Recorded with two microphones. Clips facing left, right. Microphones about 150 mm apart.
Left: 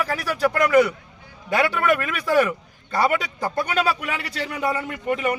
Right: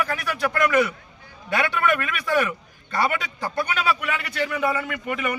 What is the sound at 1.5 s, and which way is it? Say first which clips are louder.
Speech: left 2 dB; 35° left (ahead or behind).